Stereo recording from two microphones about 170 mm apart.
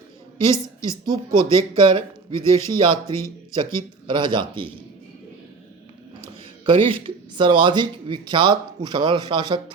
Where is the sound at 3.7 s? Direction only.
30° right (ahead or behind).